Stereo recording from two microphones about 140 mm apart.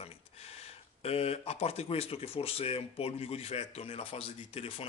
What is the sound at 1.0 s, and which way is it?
Speech, 45° left (ahead or behind).